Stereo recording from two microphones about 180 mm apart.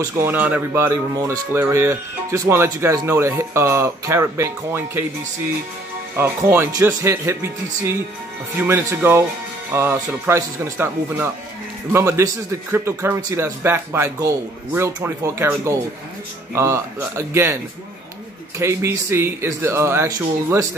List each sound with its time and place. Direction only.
0.0 s speech: 10° right (ahead or behind)
6.1 s speech: 10° right (ahead or behind)
18.6 s speech: 15° right (ahead or behind)